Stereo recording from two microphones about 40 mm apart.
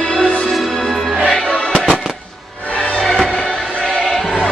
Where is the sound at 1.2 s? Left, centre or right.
Left.